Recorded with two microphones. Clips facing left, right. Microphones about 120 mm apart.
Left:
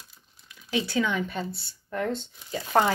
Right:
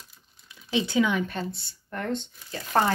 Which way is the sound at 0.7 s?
20° right (ahead or behind).